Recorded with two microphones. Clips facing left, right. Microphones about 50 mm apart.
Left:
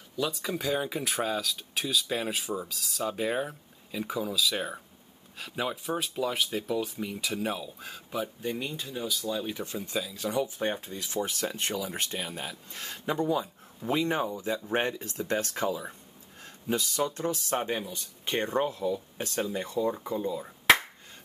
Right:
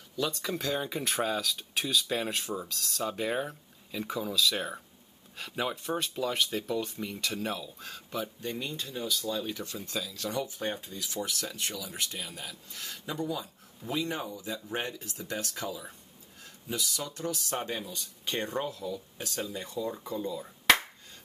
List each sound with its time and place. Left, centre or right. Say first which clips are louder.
0.2 s speech: left 1 dB; centre
10.9 s speech: left 3 dB; left
17.2 s speech: left 4 dB; left